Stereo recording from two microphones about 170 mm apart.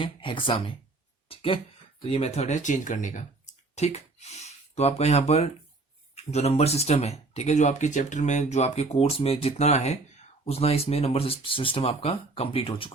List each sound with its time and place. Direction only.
0.0 s speech: 30° left (ahead or behind)
1.3 s a sound: 30° left (ahead or behind)
2.0 s speech: 35° left (ahead or behind)